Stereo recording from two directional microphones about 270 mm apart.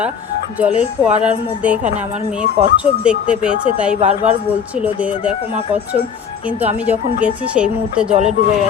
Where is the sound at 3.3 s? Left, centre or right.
Centre.